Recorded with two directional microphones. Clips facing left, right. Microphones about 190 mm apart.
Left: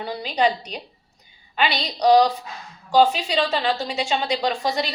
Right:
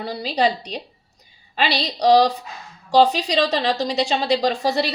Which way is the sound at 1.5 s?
30° right (ahead or behind).